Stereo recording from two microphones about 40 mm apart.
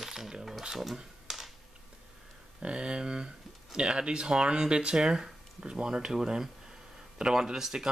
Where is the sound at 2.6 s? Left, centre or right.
Right.